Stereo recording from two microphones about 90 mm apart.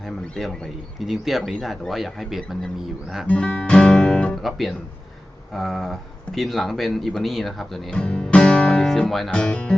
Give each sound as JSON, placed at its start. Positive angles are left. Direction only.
{"t": 0.9, "sound": "speech", "side_deg": 0}
{"t": 3.2, "sound": "guitar", "side_deg": 10}
{"t": 4.4, "sound": "speech", "side_deg": 0}
{"t": 7.9, "sound": "music", "side_deg": 10}
{"t": 9.4, "sound": "guitar", "side_deg": 10}